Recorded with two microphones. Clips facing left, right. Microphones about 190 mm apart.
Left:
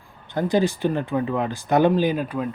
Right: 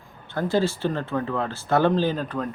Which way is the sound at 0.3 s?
15° left (ahead or behind).